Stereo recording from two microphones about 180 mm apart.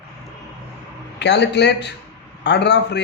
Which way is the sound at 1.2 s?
70° left (ahead or behind).